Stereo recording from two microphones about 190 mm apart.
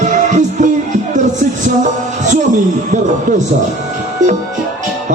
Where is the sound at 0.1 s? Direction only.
40° right (ahead or behind).